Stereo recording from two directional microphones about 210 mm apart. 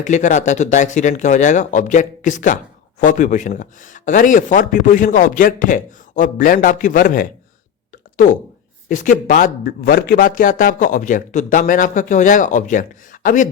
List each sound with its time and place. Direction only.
0.0 s a man's voice: 35° left (ahead or behind)